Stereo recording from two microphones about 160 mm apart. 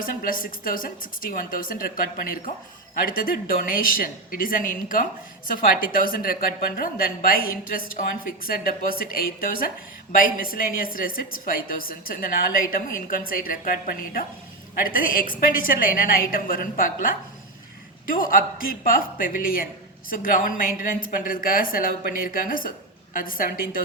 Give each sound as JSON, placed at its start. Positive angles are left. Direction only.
{"t": 0.0, "sound": "a woman's voice", "side_deg": 60}